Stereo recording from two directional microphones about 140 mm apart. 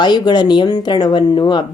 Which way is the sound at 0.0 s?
30° left (ahead or behind).